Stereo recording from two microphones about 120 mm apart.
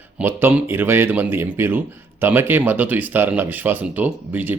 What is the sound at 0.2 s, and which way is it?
Speech, 15° right (ahead or behind).